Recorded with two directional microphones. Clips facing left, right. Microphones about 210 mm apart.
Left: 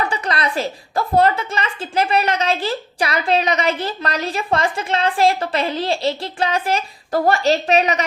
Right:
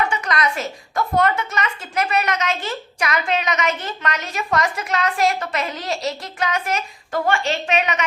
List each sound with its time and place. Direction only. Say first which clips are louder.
0.0 s a woman's voice: even; 30° left (ahead or behind)